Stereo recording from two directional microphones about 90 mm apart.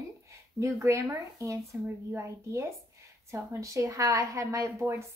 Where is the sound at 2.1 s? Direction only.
30° right (ahead or behind).